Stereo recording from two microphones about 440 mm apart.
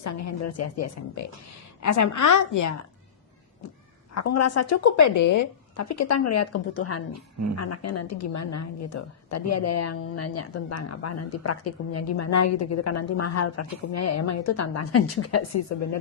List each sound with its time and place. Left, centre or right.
0.0 s a woman's voice: left
4.1 s a woman's voice: left